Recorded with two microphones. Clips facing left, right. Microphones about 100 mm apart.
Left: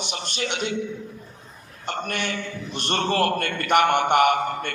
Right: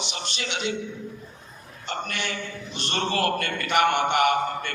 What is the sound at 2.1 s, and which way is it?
A man's voice, 50° left (ahead or behind).